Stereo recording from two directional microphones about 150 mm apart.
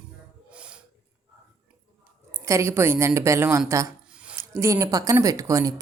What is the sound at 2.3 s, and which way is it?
Speech, 20° right (ahead or behind).